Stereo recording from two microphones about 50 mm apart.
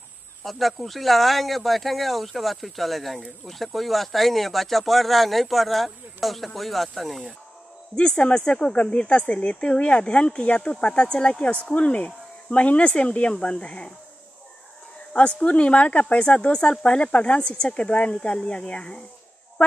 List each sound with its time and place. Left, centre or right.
0.4 s speech: centre
7.9 s speech: centre
15.4 s speech: left